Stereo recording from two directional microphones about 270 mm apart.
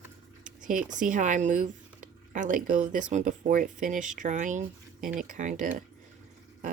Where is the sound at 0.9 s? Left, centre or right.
Right.